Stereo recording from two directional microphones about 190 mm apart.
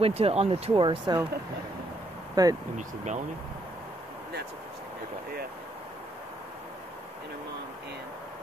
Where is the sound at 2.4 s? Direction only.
20° right (ahead or behind).